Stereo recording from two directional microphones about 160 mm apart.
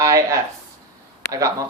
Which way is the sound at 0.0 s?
20° right (ahead or behind).